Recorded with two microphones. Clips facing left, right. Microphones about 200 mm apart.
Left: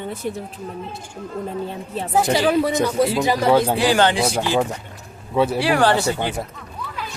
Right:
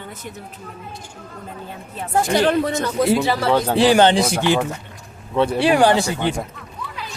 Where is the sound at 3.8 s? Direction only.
25° right (ahead or behind).